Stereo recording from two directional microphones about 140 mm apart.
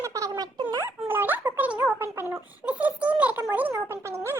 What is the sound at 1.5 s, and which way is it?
Music, 10° right (ahead or behind).